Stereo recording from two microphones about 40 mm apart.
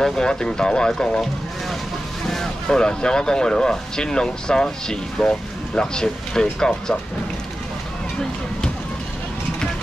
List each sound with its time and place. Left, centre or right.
0.0 s speech: centre
2.2 s speech: centre